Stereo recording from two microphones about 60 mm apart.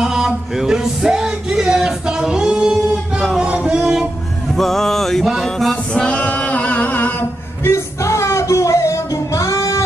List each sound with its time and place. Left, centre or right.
0.0 s music: centre
4.6 s music: centre
5.9 s a capella: centre; by 7.7 s left
7.7 s music: left